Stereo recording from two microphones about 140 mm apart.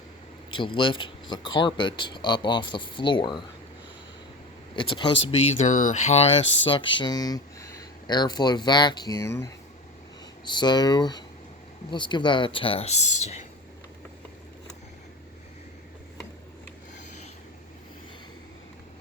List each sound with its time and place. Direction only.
0.5 s speech: 35° left (ahead or behind)
4.7 s speech: 35° left (ahead or behind)
10.4 s speech: 30° left (ahead or behind); by 13.4 s 50° left (ahead or behind)